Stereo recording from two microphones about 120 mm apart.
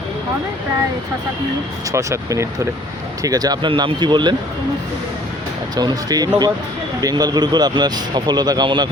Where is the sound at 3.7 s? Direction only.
45° right (ahead or behind).